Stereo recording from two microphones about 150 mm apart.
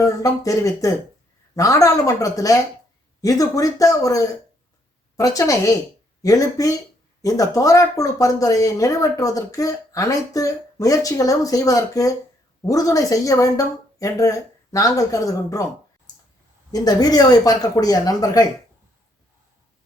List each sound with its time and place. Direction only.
0.0 s speech: 20° left (ahead or behind)
16.7 s speech: 25° left (ahead or behind)